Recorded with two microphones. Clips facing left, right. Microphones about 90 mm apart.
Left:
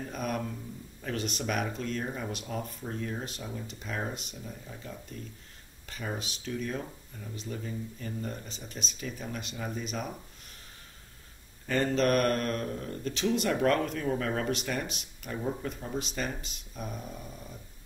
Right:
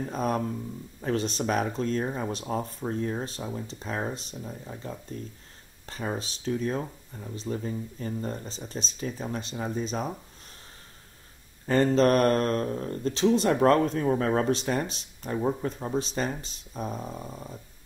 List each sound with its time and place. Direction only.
0.0 s speech: 35° right (ahead or behind)
11.6 s speech: 35° right (ahead or behind)